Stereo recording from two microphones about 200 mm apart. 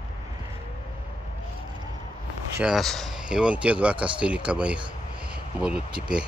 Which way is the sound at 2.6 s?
Centre (ahead or behind).